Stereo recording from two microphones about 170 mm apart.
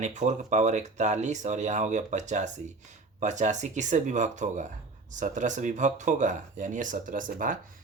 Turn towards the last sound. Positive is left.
turn(degrees=-50)  # may be behind; listen again after turning